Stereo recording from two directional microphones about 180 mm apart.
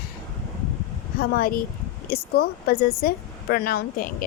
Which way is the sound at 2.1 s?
55° left (ahead or behind).